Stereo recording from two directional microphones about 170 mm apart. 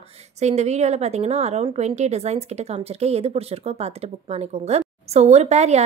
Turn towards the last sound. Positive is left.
turn(degrees=-40)  # may be behind; listen again after turning